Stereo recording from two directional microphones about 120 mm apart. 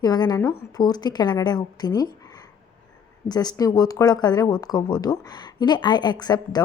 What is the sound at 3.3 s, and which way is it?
Speech, 35° left (ahead or behind).